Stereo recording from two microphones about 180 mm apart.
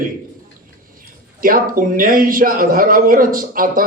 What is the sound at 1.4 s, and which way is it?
A man's voice, 50° right (ahead or behind).